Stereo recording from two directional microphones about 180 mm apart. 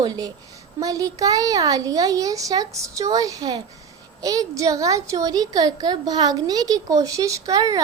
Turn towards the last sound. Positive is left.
turn(degrees=-20)  # may be behind; listen again after turning